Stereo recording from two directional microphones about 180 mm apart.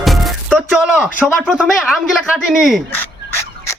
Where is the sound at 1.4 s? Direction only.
5° right (ahead or behind).